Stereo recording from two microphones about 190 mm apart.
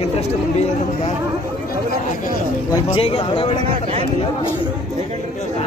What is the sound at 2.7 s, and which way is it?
Speech, 30° left (ahead or behind).